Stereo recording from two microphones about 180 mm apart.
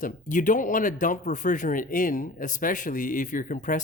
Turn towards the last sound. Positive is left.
turn(degrees=45)  # may be behind; listen again after turning